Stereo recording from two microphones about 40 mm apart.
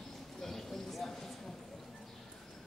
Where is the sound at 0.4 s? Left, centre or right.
Centre.